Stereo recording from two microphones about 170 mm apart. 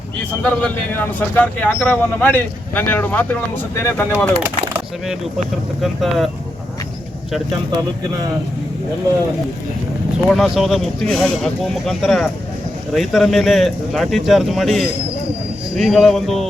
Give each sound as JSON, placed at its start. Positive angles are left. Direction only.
{"t": 0.6, "sound": "speech", "side_deg": 10}
{"t": 5.8, "sound": "speech", "side_deg": 0}
{"t": 7.7, "sound": "speech", "side_deg": -20}
{"t": 10.2, "sound": "speech", "side_deg": 0}